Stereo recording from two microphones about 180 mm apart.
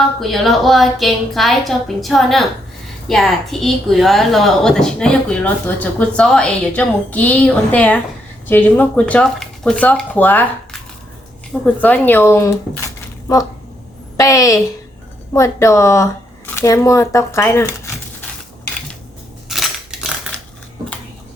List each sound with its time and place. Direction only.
0.0 s a woman's voice: centre (ahead or behind)
17.7 s a sound: 15° left (ahead or behind)
19.5 s crushing: centre (ahead or behind)